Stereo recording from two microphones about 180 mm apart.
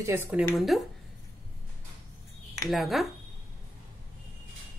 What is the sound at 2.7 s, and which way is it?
Speech, centre (ahead or behind).